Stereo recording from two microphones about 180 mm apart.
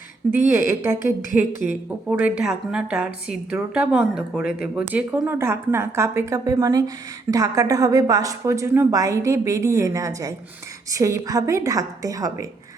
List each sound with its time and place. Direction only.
0.7 s a woman's voice: 15° right (ahead or behind)
1.3 s a woman's voice: 50° left (ahead or behind)
1.6 s a woman's voice: 10° right (ahead or behind)